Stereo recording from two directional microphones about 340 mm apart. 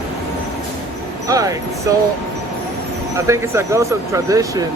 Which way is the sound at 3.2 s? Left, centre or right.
Centre.